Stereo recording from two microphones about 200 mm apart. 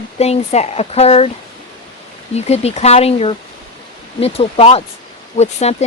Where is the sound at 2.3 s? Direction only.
30° left (ahead or behind).